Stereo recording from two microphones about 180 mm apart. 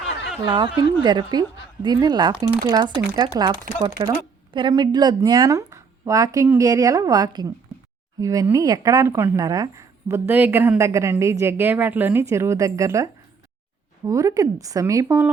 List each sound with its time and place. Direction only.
0.4 s a woman's voice: 25° right (ahead or behind)